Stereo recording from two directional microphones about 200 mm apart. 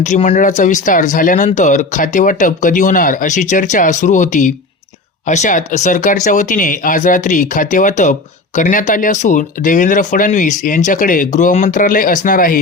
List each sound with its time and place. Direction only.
0.0 s speech: 35° left (ahead or behind)